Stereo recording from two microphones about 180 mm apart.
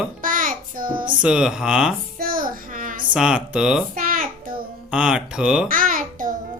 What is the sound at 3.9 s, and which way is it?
Babbling, 50° right (ahead or behind).